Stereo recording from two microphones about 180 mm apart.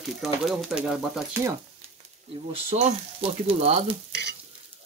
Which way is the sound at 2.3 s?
30° right (ahead or behind).